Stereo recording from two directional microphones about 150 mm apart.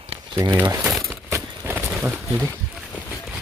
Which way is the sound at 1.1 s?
15° right (ahead or behind).